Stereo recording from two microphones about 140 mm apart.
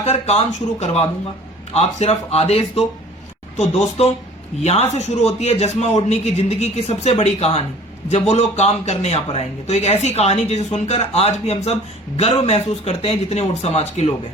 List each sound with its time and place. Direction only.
0.0 s speech: 45° left (ahead or behind)